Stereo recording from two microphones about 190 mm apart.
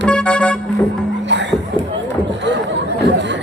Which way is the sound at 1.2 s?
70° right (ahead or behind).